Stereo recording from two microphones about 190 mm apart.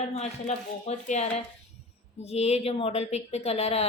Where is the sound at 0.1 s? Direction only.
35° left (ahead or behind).